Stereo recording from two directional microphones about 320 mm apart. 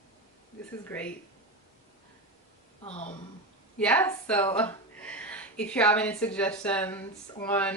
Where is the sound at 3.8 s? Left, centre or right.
Centre.